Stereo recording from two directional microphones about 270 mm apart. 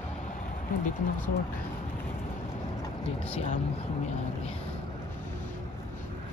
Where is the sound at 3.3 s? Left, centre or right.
Left.